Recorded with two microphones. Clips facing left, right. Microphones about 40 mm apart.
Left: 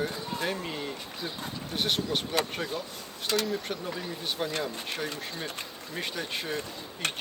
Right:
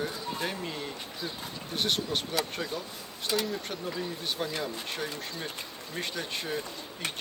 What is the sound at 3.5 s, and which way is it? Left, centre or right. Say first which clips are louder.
Speech: left 2 dB; centre.